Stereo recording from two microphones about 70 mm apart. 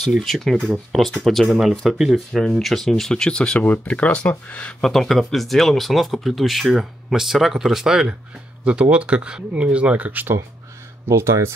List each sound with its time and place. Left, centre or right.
0.0 s speech: centre; by 4.7 s left
4.8 s speech: centre; by 10.4 s right
11.1 s speech: right